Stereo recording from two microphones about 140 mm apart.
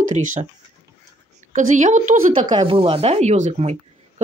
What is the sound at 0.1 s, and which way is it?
Speech, 60° right (ahead or behind).